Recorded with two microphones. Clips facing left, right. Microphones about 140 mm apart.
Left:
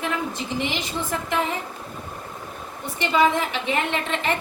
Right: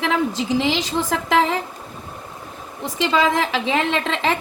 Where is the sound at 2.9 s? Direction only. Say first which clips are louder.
Right 1 dB; 90° right.